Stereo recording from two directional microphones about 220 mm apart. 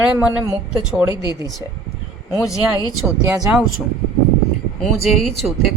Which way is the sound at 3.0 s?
5° right (ahead or behind).